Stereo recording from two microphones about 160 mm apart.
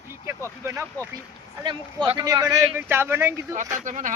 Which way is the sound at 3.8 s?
55° right (ahead or behind).